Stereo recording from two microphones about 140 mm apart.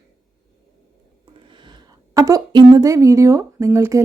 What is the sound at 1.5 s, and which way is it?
Speech, 35° right (ahead or behind).